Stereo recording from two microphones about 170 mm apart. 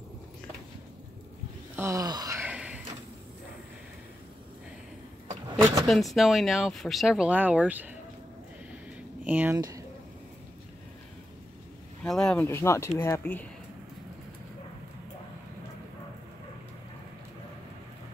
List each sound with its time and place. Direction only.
1.8 s speech: 20° right (ahead or behind)
2.5 s door: 5° right (ahead or behind)
5.9 s speech: centre (ahead or behind)
9.2 s speech: 10° right (ahead or behind)
9.6 s speech: 20° right (ahead or behind)
12.0 s speech: 5° left (ahead or behind)
12.4 s speech: 15° left (ahead or behind)